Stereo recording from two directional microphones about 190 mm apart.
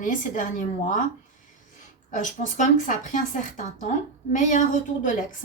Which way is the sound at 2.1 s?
40° left (ahead or behind).